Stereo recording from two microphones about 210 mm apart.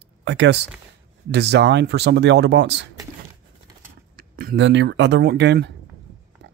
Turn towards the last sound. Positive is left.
turn(degrees=-55)  # may be behind; listen again after turning